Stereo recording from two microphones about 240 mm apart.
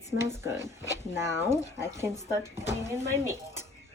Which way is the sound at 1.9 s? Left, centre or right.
Centre.